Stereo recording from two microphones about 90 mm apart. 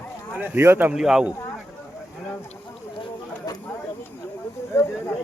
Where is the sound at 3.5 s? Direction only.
45° left (ahead or behind).